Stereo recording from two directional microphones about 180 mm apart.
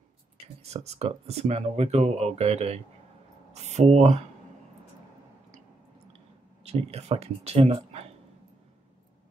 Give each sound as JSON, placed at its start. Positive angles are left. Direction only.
{"t": 0.6, "sound": "speech", "side_deg": -35}
{"t": 6.6, "sound": "speech", "side_deg": -35}